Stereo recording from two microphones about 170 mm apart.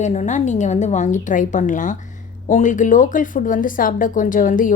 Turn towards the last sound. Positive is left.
turn(degrees=50)  # may be behind; listen again after turning